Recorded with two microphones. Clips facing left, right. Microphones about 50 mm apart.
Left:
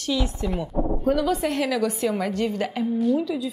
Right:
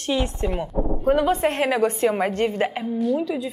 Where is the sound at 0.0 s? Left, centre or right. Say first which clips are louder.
Right 2 dB; right.